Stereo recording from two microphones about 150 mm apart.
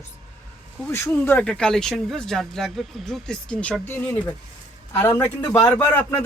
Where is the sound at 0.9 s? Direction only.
15° left (ahead or behind).